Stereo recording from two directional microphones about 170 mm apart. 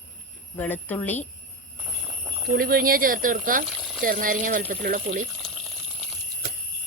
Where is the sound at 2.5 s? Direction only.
60° right (ahead or behind).